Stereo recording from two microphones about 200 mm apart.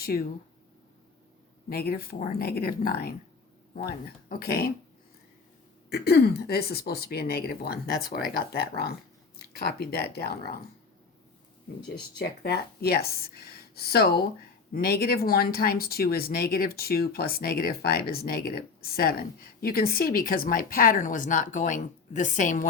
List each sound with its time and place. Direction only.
0.0 s speech: 50° left (ahead or behind)
1.7 s speech: 50° left (ahead or behind)
5.9 s speech: 50° left (ahead or behind)
12.2 s speech: 50° left (ahead or behind)